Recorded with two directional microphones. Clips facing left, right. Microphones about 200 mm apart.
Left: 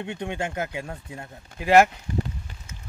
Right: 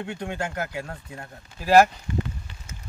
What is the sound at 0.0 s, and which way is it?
Speech, 20° left (ahead or behind).